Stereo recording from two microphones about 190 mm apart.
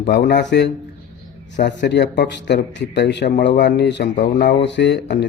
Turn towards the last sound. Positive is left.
turn(degrees=60)  # may be behind; listen again after turning